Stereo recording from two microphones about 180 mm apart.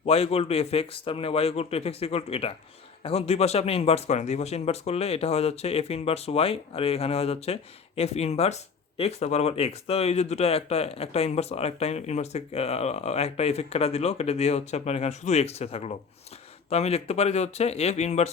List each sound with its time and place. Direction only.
0.0 s speech: 35° left (ahead or behind)